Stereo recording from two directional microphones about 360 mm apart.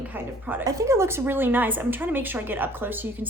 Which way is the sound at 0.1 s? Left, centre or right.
Centre.